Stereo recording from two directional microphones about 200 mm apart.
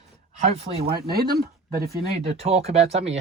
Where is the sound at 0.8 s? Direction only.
50° right (ahead or behind).